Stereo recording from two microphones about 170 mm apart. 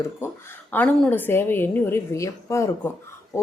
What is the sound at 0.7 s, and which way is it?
A woman's voice, 10° left (ahead or behind).